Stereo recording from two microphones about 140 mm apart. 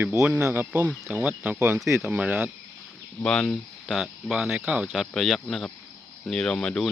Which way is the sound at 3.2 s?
10° left (ahead or behind).